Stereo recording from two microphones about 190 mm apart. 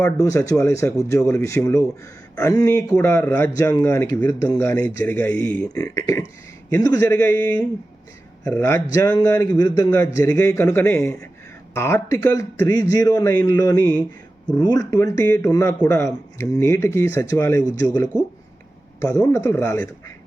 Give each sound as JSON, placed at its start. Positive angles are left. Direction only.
{"t": 0.0, "sound": "a man's voice", "side_deg": 15}
{"t": 5.7, "sound": "a man's voice", "side_deg": 15}